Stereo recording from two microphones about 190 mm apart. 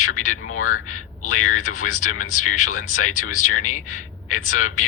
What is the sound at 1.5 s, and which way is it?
Speech, 40° left (ahead or behind).